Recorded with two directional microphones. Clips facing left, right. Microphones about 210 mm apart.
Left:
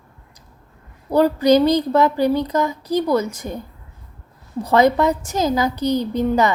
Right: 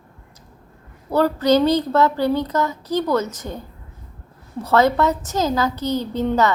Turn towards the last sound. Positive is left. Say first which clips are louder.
# left 1 dB
turn(degrees=15)  # may be behind; listen again after turning